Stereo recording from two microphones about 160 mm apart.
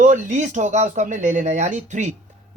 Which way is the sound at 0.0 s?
50° right (ahead or behind).